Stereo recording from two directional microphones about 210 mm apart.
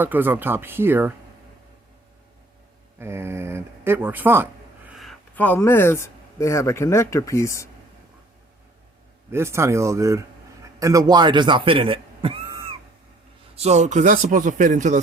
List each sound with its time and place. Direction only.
0.0 s speech: 10° right (ahead or behind)
3.0 s speech: 10° right (ahead or behind); by 7.7 s 15° left (ahead or behind)
9.3 s a man's voice: 10° right (ahead or behind); by 14.9 s 35° right (ahead or behind)